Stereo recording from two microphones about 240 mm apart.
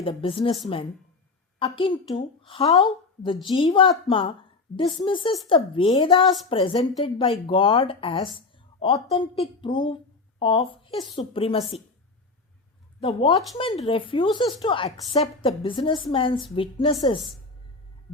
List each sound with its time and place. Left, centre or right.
0.0 s speech: left
1.5 s speech: left
13.0 s speech: left